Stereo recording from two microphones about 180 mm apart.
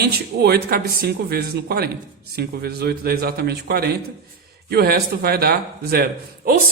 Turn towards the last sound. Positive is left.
turn(degrees=-55)  # may be behind; listen again after turning